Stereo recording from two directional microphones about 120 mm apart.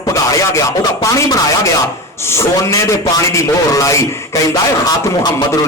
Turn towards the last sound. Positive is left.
turn(degrees=25)  # may be behind; listen again after turning